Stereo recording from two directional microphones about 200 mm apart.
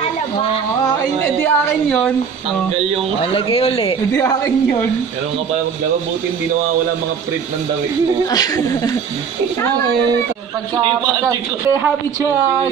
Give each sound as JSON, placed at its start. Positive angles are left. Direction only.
{"t": 1.4, "sound": "a woman's voice", "side_deg": 5}
{"t": 3.2, "sound": "a man's voice", "side_deg": 30}
{"t": 4.1, "sound": "a woman's voice", "side_deg": 15}
{"t": 8.3, "sound": "a man's voice", "side_deg": 20}
{"t": 11.2, "sound": "speech", "side_deg": -15}